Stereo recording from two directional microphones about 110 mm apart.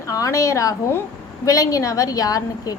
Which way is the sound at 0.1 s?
30° left (ahead or behind).